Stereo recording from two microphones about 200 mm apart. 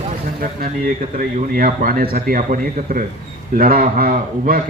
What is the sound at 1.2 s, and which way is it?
Speech, 45° right (ahead or behind).